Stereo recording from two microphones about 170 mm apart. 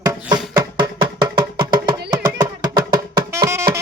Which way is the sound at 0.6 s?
25° right (ahead or behind).